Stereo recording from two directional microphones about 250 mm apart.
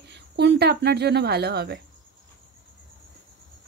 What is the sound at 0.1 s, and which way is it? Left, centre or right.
Speech, right.